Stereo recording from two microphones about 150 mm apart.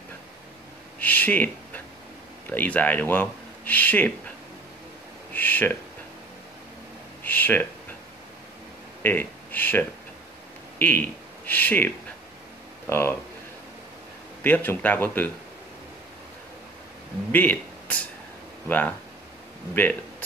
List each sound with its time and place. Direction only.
0.9 s a sound: 10° left (ahead or behind)
2.5 s speech: 10° left (ahead or behind)
5.3 s speech: 10° left (ahead or behind)
7.2 s a sound: 10° left (ahead or behind)
9.0 s speech: 15° left (ahead or behind)
12.9 s speech: 15° left (ahead or behind)
14.4 s speech: 15° left (ahead or behind)
17.3 s speech: 10° left (ahead or behind)